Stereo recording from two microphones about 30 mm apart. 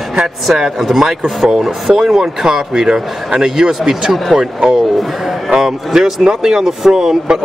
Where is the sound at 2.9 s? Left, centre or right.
Right.